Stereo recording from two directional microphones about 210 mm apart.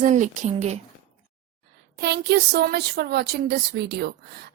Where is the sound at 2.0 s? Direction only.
50° right (ahead or behind).